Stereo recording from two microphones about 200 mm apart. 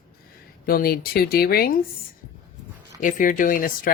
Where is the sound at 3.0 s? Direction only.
40° left (ahead or behind).